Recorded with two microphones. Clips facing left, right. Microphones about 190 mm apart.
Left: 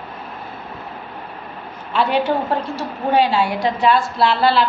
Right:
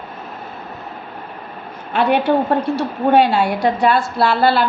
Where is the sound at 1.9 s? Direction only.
55° right (ahead or behind).